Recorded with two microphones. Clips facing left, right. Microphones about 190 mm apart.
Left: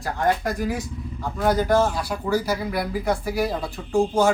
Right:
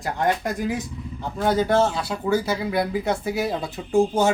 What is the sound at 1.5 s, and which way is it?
Speech, 25° right (ahead or behind).